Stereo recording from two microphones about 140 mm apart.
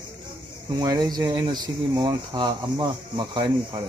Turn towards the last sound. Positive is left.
turn(degrees=-35)  # may be behind; listen again after turning